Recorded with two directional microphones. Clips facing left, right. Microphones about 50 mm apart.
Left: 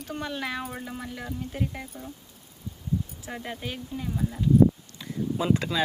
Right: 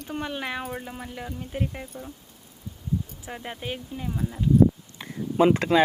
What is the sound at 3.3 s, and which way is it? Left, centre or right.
Speech, centre.